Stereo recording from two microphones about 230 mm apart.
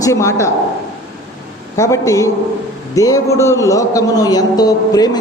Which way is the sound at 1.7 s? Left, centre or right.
Centre.